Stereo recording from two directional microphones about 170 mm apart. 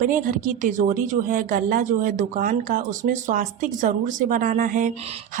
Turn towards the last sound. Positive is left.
turn(degrees=-50)  # may be behind; listen again after turning